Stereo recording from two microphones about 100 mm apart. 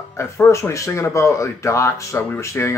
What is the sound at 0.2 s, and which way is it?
Speech, 25° left (ahead or behind).